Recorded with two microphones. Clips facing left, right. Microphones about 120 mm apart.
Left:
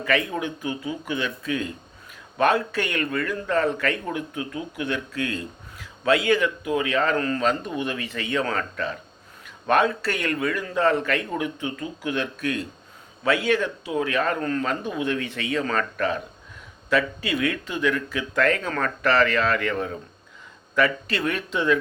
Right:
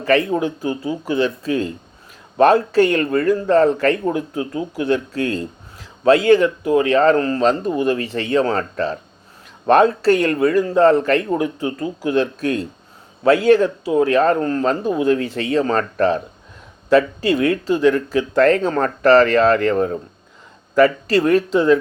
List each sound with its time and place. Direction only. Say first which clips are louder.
0.0 s a man's voice: right 8 dB; 40° right (ahead or behind)